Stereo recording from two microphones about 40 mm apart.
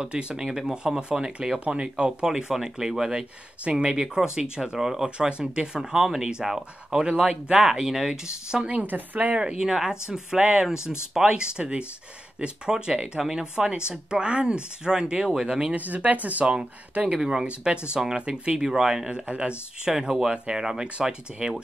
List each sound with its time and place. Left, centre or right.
0.1 s speech: right
0.4 s speech: centre
1.6 s speech: right
2.5 s speech: centre
5.1 s speech: right
8.1 s speech: right
8.6 s a woman's voice: right
9.4 s speech: centre
15.7 s speech: right
17.1 s speech: centre
18.6 s speech: centre
19.1 s speech: right
19.9 s speech: centre